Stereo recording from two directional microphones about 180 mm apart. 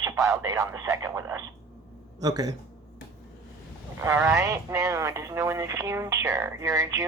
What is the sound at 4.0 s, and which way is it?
Speech, 15° right (ahead or behind).